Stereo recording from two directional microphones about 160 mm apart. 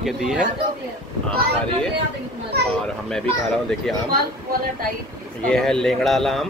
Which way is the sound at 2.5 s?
90° right.